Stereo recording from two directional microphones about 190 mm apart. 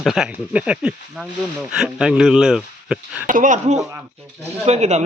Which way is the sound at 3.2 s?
45° right (ahead or behind).